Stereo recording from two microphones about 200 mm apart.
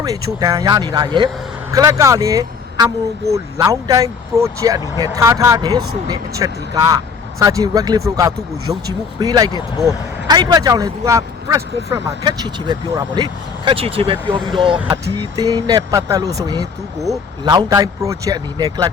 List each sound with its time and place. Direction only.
0.0 s speech: 15° right (ahead or behind)